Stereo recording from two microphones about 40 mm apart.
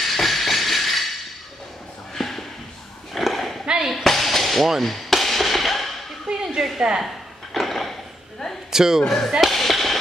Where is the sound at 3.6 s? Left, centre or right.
Right.